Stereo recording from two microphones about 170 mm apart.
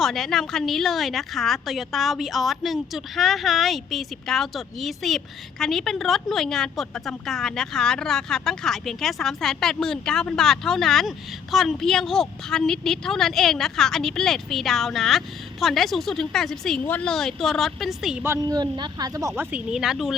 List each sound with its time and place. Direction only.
0.0 s a woman's voice: centre (ahead or behind)
18.3 s speech: 20° right (ahead or behind)
19.4 s a woman's voice: 10° right (ahead or behind)